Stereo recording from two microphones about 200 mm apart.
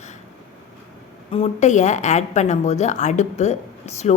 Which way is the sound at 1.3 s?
35° left (ahead or behind).